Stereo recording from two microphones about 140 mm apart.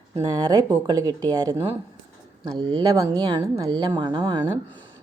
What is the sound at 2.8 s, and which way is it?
Speech, 30° right (ahead or behind).